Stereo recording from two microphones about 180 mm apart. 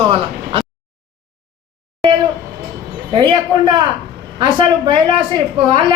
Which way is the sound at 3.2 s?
25° right (ahead or behind).